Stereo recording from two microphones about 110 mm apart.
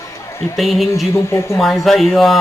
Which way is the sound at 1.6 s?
Centre (ahead or behind).